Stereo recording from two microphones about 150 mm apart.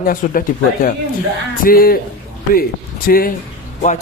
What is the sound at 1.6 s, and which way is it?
Speech, 75° left (ahead or behind).